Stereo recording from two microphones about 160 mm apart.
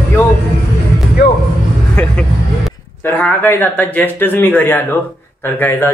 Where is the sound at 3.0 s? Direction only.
10° left (ahead or behind).